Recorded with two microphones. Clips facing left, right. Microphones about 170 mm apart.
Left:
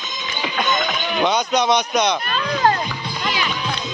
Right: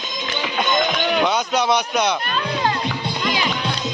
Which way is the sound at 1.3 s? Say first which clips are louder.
Left 1 dB; 5° right (ahead or behind).